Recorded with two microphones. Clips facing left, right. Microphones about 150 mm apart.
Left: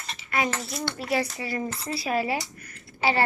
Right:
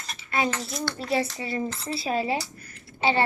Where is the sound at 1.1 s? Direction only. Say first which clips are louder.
Right 1 dB; 25° right (ahead or behind).